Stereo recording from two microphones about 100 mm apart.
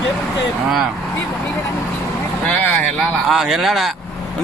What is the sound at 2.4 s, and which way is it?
Speech, 15° left (ahead or behind).